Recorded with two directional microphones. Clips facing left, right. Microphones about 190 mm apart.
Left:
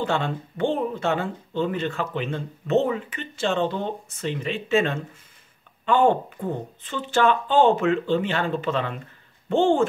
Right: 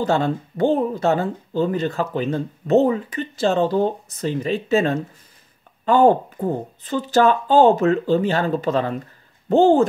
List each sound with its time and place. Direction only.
0.0 s speech: 40° right (ahead or behind)